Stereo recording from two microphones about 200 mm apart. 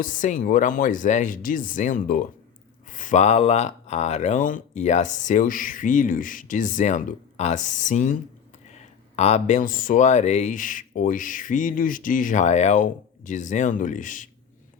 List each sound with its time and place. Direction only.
0.0 s speech: 40° left (ahead or behind)